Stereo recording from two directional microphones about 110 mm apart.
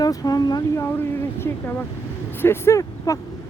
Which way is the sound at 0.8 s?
20° left (ahead or behind).